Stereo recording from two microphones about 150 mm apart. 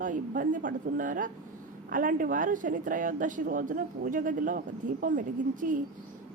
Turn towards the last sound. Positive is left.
turn(degrees=-65)  # may be behind; listen again after turning